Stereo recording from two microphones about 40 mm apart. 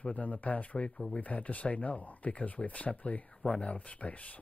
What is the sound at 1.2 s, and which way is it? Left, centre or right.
Speech, left.